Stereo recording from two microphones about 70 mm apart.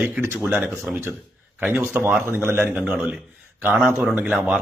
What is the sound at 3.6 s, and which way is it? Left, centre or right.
Speech, right.